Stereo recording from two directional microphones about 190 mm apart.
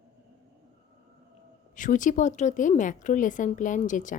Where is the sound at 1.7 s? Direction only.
45° left (ahead or behind).